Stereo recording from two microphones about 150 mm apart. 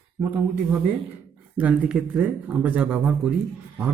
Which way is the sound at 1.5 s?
10° right (ahead or behind).